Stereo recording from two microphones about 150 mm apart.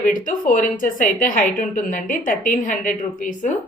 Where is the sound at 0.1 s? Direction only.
60° left (ahead or behind).